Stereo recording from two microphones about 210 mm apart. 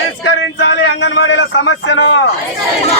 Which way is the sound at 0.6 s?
60° left (ahead or behind).